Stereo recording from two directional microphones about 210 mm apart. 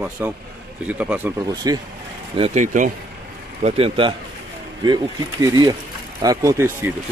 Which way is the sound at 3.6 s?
25° right (ahead or behind).